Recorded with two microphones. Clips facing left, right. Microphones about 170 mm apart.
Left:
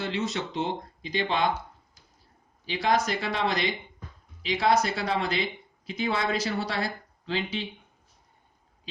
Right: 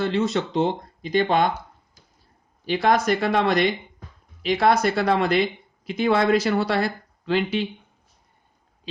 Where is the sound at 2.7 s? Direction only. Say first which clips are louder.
Right 6 dB; 55° right (ahead or behind).